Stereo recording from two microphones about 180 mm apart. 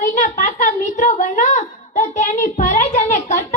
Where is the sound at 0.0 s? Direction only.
45° left (ahead or behind).